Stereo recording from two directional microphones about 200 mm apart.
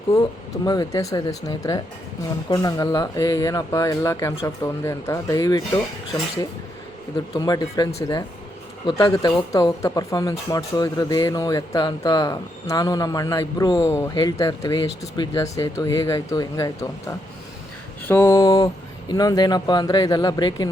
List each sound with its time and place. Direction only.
0.1 s speech: 20° left (ahead or behind)
7.3 s speech: 20° left (ahead or behind)
8.9 s speech: 25° left (ahead or behind)